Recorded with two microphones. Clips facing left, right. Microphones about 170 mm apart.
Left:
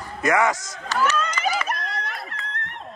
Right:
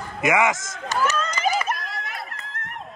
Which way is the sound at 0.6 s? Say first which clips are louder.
Even; 45° right (ahead or behind).